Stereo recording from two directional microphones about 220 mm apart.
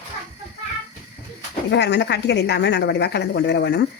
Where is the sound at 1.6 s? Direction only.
50° left (ahead or behind).